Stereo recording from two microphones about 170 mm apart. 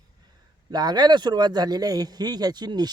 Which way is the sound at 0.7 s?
25° right (ahead or behind).